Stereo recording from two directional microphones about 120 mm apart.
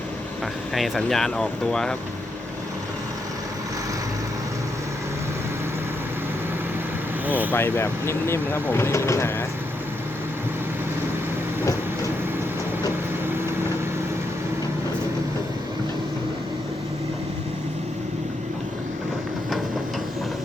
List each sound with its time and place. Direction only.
0.7 s speech: centre (ahead or behind)
7.3 s speech: 15° right (ahead or behind)
7.5 s speech: 20° left (ahead or behind)